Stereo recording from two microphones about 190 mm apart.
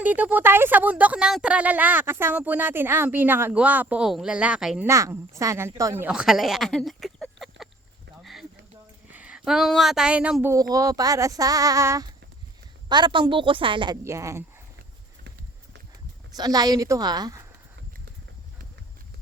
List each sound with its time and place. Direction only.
0.0 s speech: 10° right (ahead or behind)
4.9 s speech: 15° right (ahead or behind); by 7.7 s centre (ahead or behind)
8.2 s a sound: centre (ahead or behind)
9.1 s a woman's voice: 5° right (ahead or behind)
16.3 s a woman's voice: 20° right (ahead or behind)